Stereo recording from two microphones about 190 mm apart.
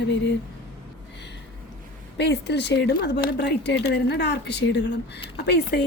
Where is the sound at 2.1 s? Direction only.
60° left (ahead or behind).